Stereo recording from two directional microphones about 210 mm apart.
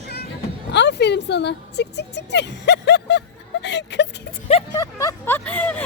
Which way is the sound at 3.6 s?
55° left (ahead or behind).